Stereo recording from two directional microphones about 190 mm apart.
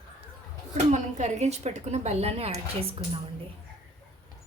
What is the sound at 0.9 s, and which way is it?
Speech, 35° right (ahead or behind).